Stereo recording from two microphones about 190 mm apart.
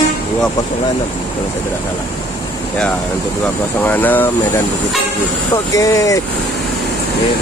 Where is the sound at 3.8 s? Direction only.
10° left (ahead or behind).